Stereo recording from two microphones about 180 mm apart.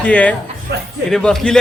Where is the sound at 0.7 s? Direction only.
65° right (ahead or behind).